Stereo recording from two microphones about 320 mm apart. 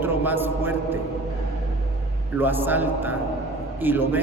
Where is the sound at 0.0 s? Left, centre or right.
Centre.